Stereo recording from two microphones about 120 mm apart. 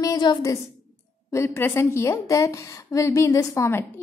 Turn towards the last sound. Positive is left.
turn(degrees=25)  # may be behind; listen again after turning